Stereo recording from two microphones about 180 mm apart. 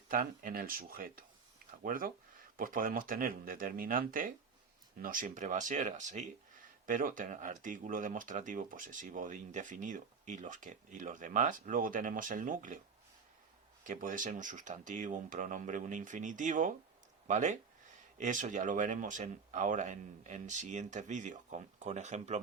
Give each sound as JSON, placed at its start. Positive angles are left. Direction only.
{"t": 0.1, "sound": "speech", "side_deg": -50}
{"t": 13.8, "sound": "speech", "side_deg": -45}